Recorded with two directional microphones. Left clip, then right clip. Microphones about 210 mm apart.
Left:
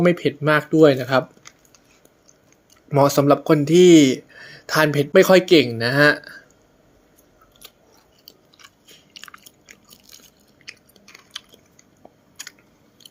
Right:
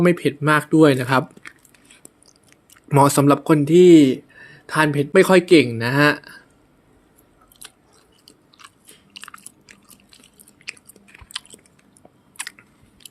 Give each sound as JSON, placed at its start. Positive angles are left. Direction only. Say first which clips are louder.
{"t": 0.0, "sound": "speech", "louder": "even", "side_deg": -5}
{"t": 2.9, "sound": "speech", "louder": "right 1 dB", "side_deg": -15}
{"t": 8.6, "sound": "biting", "louder": "right 1 dB", "side_deg": -10}
{"t": 10.6, "sound": "chewing", "louder": "right 5 dB", "side_deg": -15}
{"t": 11.3, "sound": "biting", "louder": "right 4 dB", "side_deg": -15}
{"t": 12.4, "sound": "chewing", "louder": "right 5 dB", "side_deg": -20}